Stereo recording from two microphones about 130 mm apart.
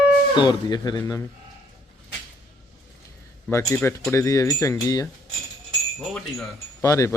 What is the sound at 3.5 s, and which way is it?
Speech, 20° left (ahead or behind).